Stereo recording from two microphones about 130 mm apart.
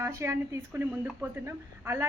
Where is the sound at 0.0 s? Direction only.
20° right (ahead or behind).